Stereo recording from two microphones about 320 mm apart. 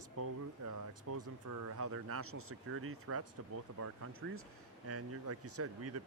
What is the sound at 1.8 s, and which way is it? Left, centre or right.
Speech, right.